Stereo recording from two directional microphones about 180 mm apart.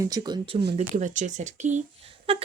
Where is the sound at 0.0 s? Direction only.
20° right (ahead or behind).